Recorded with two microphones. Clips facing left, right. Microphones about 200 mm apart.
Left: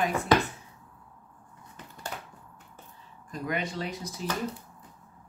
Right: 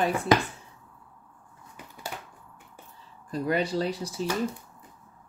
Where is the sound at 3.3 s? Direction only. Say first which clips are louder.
Right 6 dB; 35° right (ahead or behind).